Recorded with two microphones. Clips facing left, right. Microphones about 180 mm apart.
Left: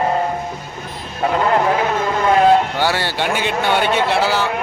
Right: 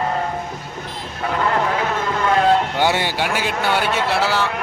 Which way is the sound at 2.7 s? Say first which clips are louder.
Even; 20° right (ahead or behind).